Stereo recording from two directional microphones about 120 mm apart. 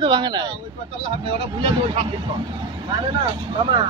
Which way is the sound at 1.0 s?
50° right (ahead or behind).